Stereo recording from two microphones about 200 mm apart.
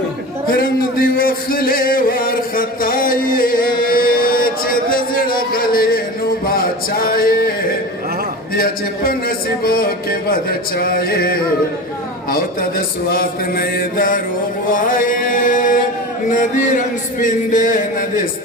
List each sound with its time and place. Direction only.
0.4 s music: 45° left (ahead or behind)
8.5 s a man's voice: 45° left (ahead or behind)
13.1 s a man's voice: 45° left (ahead or behind)
14.7 s a sound: 45° left (ahead or behind)